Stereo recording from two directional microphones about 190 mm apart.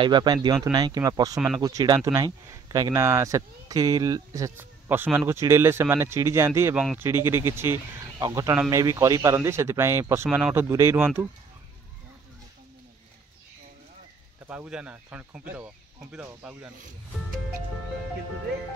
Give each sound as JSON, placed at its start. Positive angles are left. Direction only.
{"t": 0.0, "sound": "speech", "side_deg": -25}
{"t": 14.5, "sound": "speech", "side_deg": -5}